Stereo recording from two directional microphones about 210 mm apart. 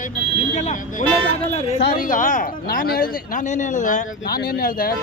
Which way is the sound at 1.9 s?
40° left (ahead or behind).